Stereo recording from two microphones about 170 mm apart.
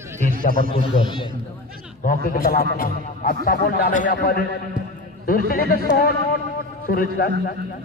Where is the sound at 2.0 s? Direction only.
55° left (ahead or behind).